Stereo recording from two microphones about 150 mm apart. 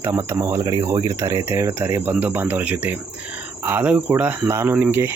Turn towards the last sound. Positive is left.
turn(degrees=-15)  # may be behind; listen again after turning